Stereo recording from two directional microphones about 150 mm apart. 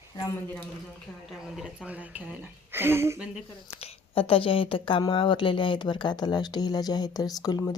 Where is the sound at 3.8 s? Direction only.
40° left (ahead or behind).